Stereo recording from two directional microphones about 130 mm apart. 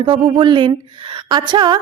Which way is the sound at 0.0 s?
40° right (ahead or behind).